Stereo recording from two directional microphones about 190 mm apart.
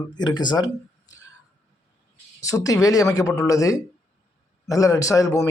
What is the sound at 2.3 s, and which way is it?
Speech, 15° left (ahead or behind).